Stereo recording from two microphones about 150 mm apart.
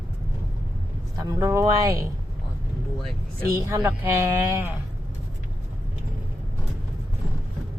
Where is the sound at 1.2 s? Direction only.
25° right (ahead or behind).